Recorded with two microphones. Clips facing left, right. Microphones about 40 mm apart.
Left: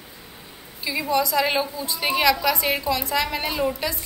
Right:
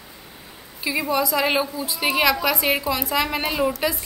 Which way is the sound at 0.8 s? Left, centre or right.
Centre.